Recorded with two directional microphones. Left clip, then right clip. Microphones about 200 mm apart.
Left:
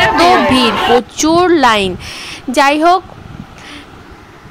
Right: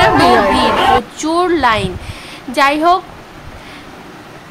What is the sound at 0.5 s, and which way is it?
A woman's voice, 40° left (ahead or behind).